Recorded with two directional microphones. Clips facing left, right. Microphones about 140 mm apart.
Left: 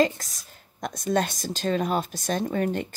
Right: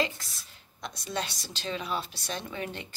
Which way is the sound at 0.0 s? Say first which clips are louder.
Left 8 dB; 40° left (ahead or behind).